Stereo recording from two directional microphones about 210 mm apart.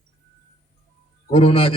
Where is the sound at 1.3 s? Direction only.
30° left (ahead or behind).